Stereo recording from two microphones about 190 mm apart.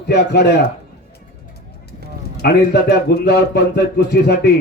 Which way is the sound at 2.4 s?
60° left (ahead or behind).